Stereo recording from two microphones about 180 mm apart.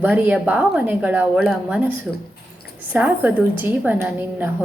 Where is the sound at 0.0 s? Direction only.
10° right (ahead or behind).